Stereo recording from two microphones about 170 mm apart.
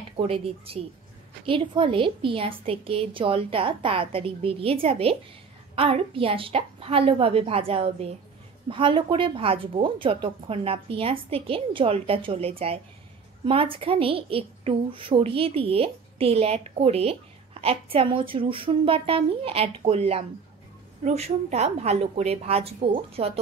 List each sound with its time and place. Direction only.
0.2 s a woman's voice: 35° right (ahead or behind)